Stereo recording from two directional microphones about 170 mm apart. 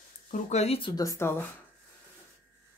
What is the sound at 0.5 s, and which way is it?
Speech, 35° left (ahead or behind).